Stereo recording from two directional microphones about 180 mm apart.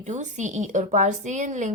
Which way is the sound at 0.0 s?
40° right (ahead or behind).